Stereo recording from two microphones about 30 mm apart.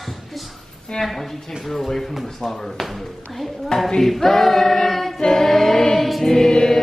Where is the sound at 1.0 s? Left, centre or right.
Centre.